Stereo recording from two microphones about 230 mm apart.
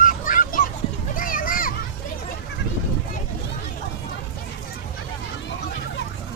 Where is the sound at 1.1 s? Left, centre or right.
Left.